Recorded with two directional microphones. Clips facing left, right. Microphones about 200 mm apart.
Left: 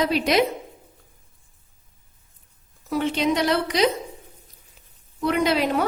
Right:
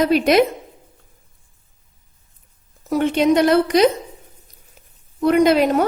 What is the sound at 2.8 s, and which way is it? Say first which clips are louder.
A woman's voice: right 6 dB; 50° right (ahead or behind).